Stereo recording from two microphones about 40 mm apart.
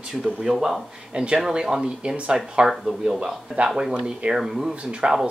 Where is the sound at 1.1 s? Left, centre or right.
Right.